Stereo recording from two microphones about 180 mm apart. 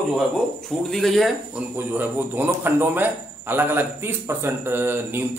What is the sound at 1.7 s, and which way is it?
Speech, 10° right (ahead or behind).